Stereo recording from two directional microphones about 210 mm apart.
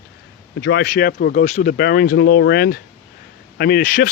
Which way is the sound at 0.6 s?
50° left (ahead or behind).